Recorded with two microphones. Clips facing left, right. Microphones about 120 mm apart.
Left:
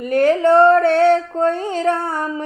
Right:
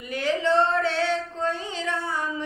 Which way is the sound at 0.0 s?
50° left (ahead or behind).